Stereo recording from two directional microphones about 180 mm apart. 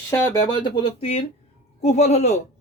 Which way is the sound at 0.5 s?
25° left (ahead or behind).